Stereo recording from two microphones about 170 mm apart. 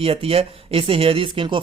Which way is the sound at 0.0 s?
35° right (ahead or behind).